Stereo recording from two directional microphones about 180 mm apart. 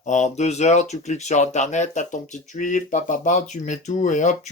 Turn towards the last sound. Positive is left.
turn(degrees=45)  # may be behind; listen again after turning